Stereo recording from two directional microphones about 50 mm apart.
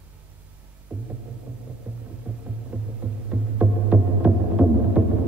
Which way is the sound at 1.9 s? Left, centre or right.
Right.